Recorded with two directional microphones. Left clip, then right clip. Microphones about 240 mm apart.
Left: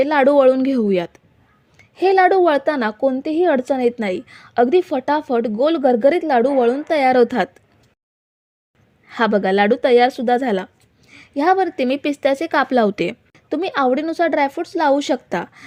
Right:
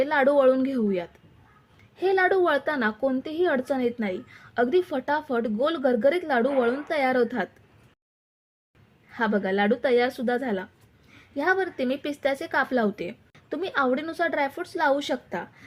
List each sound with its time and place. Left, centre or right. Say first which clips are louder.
0.0 s a woman's voice: left 7 dB; left
9.0 s a woman's voice: left 9 dB; left